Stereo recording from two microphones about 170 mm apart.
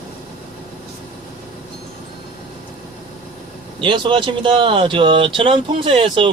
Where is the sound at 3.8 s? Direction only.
30° right (ahead or behind).